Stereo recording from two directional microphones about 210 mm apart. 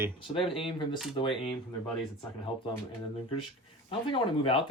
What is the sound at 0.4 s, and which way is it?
Speech, 25° left (ahead or behind).